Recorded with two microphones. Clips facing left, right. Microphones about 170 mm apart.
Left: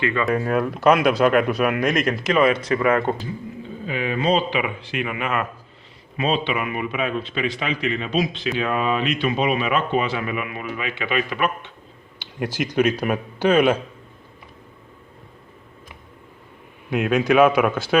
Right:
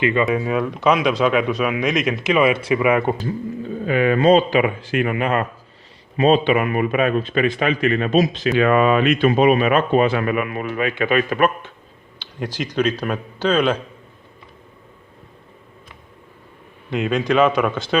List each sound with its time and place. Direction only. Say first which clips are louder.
0.0 s speech: right 4 dB; 20° right (ahead or behind)
0.3 s speech: right 1 dB; centre (ahead or behind)
3.8 s speech: right 7 dB; 55° right (ahead or behind)
8.5 s speech: right 8 dB; 65° right (ahead or behind); by 11.7 s 45° right (ahead or behind)
12.2 s speech: left 1 dB; 10° left (ahead or behind)
16.9 s speech: left 1 dB; 5° left (ahead or behind)